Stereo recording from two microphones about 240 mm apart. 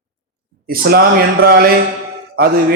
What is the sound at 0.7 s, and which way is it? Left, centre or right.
A man's voice, right.